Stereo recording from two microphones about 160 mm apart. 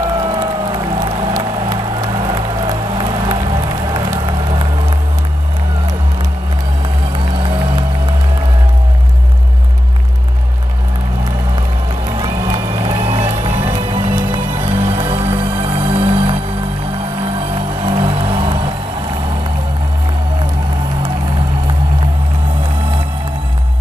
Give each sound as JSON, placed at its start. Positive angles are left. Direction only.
{"t": 0.2, "sound": "music", "side_deg": -30}
{"t": 12.2, "sound": "music", "side_deg": -30}
{"t": 17.8, "sound": "music", "side_deg": -35}